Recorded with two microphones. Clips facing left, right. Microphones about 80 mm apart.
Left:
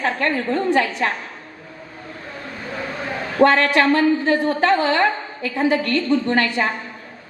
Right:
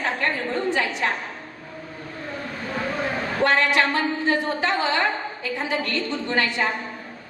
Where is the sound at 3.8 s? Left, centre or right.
Left.